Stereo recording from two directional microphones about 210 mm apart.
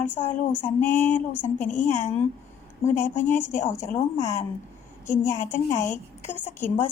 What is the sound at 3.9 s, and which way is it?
Female singing, 15° left (ahead or behind).